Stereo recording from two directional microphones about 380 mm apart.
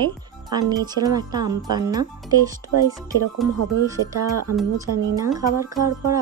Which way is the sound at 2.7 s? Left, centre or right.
Right.